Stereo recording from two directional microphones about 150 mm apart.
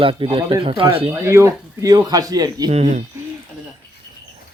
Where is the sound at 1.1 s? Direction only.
20° right (ahead or behind).